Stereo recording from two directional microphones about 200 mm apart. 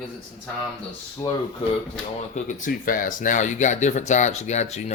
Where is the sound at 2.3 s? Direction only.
40° left (ahead or behind).